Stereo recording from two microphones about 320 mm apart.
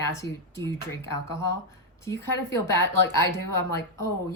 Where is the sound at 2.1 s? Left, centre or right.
Left.